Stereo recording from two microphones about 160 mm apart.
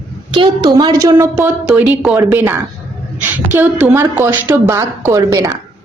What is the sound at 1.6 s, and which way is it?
A woman's voice, 5° right (ahead or behind).